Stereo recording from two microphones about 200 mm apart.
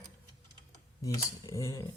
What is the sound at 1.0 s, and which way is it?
Speech, 15° left (ahead or behind).